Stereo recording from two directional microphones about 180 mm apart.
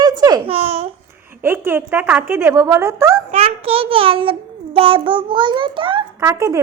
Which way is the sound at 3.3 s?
35° right (ahead or behind).